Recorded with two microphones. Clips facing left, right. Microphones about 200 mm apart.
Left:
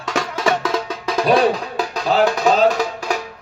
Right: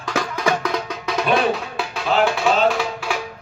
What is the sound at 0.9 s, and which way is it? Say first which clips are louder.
Music: left 4 dB; 35° left (ahead or behind).